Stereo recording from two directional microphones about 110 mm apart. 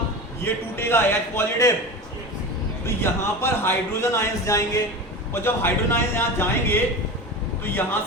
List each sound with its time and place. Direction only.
0.4 s speech: 20° left (ahead or behind)
2.8 s speech: 20° left (ahead or behind)